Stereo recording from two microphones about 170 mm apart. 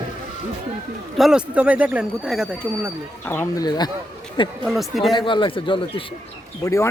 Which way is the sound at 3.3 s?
15° left (ahead or behind).